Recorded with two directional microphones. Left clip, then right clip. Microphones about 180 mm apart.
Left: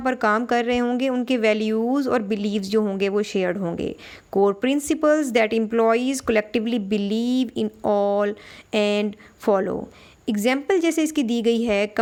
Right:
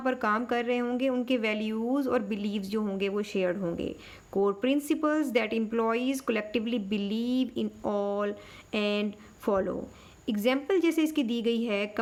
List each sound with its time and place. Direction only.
0.0 s a woman's voice: 35° left (ahead or behind)